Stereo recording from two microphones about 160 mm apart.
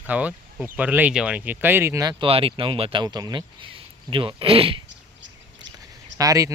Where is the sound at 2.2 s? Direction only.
35° right (ahead or behind).